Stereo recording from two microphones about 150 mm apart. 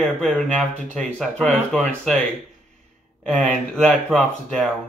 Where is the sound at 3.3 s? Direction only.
5° left (ahead or behind).